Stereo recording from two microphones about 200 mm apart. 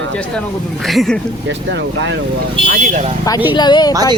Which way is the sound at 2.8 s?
40° right (ahead or behind).